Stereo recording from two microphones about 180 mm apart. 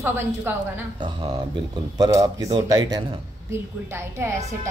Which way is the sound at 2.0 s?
20° right (ahead or behind).